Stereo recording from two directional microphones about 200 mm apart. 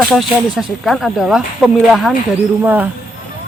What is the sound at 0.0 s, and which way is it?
Speech, centre (ahead or behind).